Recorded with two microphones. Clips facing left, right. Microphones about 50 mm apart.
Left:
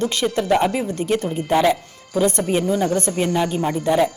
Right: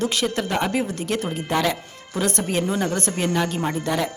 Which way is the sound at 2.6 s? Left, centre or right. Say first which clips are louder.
Left 4 dB; right.